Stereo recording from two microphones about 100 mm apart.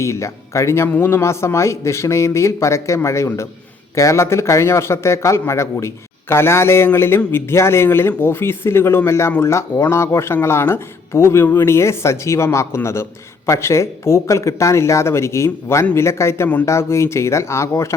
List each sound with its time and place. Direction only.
0.0 s a man's voice: 30° left (ahead or behind)